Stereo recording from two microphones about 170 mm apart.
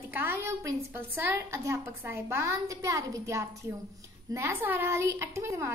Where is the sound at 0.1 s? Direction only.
10° right (ahead or behind).